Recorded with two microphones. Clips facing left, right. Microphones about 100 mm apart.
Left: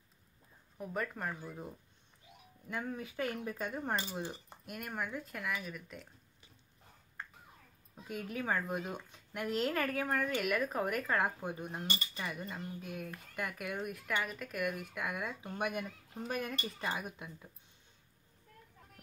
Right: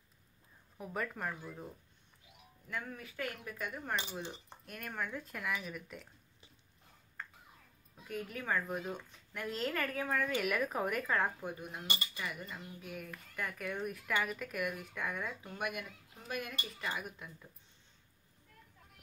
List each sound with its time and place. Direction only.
0.7 s speech: centre (ahead or behind)
2.7 s speech: 20° left (ahead or behind)
4.1 s speech: 10° left (ahead or behind)
8.1 s speech: 15° left (ahead or behind)
10.0 s speech: 5° left (ahead or behind)
11.4 s speech: 25° left (ahead or behind)
12.1 s cutlery: 30° left (ahead or behind)
12.8 s speech: 20° left (ahead or behind)